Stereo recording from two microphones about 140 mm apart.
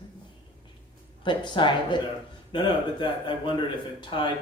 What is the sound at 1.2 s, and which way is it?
Speech, 35° left (ahead or behind).